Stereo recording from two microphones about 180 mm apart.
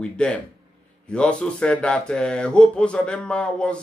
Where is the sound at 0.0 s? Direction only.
5° left (ahead or behind).